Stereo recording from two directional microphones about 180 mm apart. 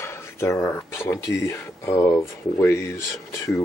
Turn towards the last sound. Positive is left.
turn(degrees=15)  # may be behind; listen again after turning